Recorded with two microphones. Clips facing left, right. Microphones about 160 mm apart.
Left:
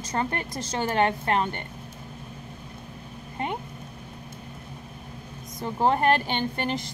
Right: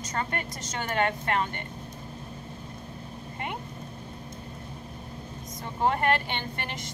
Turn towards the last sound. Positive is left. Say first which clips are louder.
# left 7 dB
turn(degrees=30)  # may be behind; listen again after turning